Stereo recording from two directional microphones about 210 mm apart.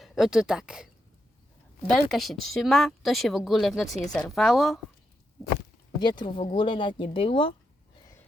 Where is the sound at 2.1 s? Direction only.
Centre (ahead or behind).